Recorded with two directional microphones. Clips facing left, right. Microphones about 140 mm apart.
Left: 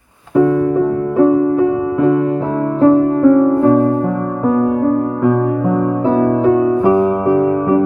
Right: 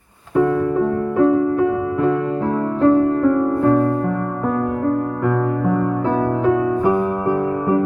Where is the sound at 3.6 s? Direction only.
20° left (ahead or behind).